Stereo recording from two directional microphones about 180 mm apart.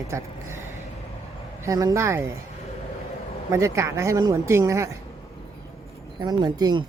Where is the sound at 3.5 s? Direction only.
15° right (ahead or behind).